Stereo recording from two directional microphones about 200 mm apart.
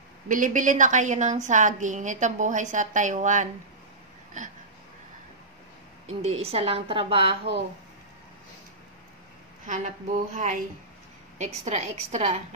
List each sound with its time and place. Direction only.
0.3 s a woman's voice: 40° right (ahead or behind)
6.4 s a woman's voice: 30° right (ahead or behind)
9.7 s a woman's voice: 40° right (ahead or behind)